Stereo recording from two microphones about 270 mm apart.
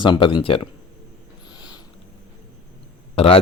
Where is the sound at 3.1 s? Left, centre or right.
Left.